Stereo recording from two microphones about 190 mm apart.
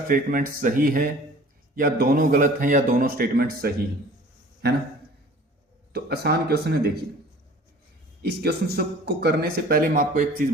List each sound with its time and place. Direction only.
0.1 s a man's voice: 45° right (ahead or behind)
5.9 s a man's voice: 55° right (ahead or behind)
8.2 s a man's voice: 60° right (ahead or behind)